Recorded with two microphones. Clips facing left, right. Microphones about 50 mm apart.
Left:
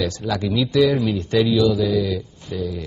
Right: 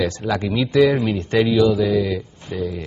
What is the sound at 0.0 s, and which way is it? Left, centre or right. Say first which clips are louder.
Speech: right 2 dB; right.